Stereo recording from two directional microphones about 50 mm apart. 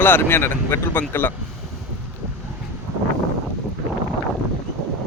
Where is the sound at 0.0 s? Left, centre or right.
Left.